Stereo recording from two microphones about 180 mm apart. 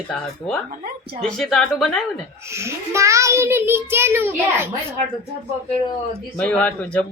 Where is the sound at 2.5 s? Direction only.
15° right (ahead or behind).